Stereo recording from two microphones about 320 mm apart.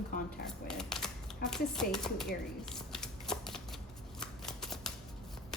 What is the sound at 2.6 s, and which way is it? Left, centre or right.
Shuffling cards, centre.